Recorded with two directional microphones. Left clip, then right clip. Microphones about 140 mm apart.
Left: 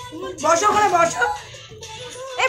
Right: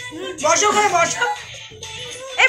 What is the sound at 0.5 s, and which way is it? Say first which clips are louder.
Speech: even; 90° left.